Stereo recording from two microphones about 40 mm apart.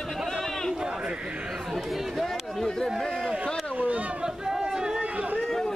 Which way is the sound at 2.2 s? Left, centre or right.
Centre.